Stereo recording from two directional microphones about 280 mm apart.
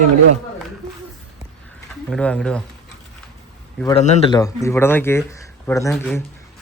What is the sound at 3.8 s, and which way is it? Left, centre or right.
A man's voice, left.